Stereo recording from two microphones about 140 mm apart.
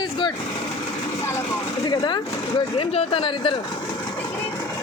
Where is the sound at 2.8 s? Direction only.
45° left (ahead or behind).